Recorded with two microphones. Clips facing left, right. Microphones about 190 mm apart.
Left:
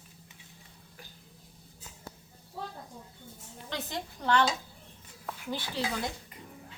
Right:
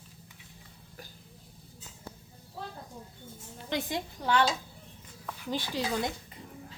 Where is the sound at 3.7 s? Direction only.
15° right (ahead or behind).